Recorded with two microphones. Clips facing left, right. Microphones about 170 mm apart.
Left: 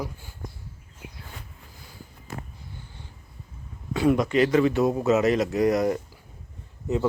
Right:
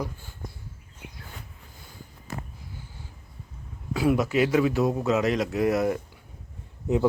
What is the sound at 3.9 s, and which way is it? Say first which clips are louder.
A man's voice: left 2 dB; 5° right (ahead or behind).